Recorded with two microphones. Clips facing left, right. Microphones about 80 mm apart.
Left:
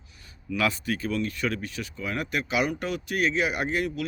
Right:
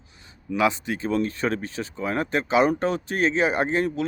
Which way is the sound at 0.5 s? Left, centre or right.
Right.